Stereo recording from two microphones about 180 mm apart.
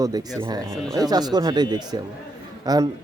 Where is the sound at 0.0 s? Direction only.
20° right (ahead or behind).